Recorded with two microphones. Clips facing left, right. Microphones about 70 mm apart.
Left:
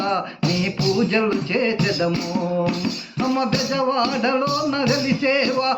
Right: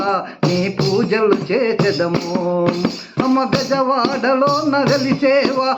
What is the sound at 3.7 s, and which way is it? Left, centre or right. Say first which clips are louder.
A man's voice: right 4 dB; right.